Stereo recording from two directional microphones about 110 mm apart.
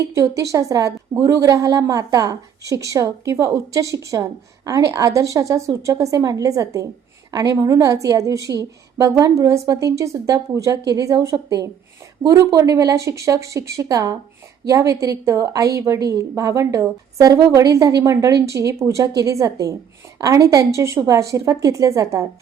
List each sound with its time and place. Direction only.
0.0 s a woman's voice: 30° right (ahead or behind)